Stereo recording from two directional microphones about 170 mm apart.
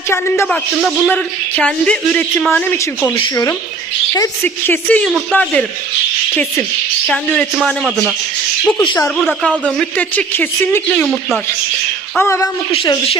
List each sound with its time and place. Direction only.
0.4 s speech: centre (ahead or behind)
8.8 s speech: 30° left (ahead or behind)
9.0 s speech: centre (ahead or behind)
12.2 s speech: 15° left (ahead or behind)
12.7 s speech: 30° left (ahead or behind)